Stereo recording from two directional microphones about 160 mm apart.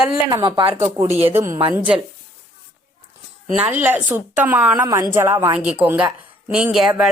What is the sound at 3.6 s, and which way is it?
A woman's voice, 15° right (ahead or behind).